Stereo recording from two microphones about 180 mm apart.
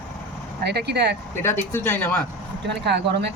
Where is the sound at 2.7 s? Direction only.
70° right (ahead or behind).